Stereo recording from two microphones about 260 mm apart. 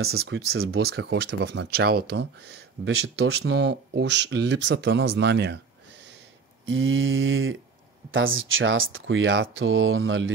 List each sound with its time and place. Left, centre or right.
0.0 s speech: right
6.6 s speech: right